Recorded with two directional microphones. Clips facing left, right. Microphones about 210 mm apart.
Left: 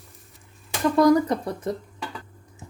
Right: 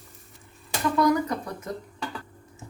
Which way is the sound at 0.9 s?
35° left (ahead or behind).